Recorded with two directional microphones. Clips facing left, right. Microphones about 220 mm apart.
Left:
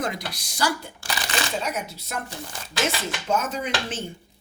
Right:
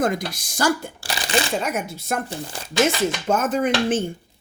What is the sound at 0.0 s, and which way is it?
Speech, 50° right (ahead or behind).